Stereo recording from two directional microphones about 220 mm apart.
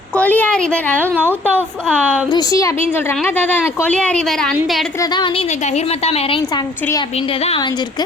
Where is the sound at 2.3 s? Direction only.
15° left (ahead or behind); by 4.9 s centre (ahead or behind).